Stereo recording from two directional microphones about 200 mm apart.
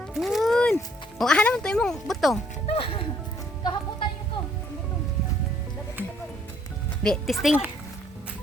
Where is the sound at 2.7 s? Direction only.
30° left (ahead or behind).